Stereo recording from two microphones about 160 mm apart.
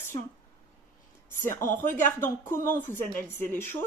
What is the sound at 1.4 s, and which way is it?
Speech, 15° left (ahead or behind).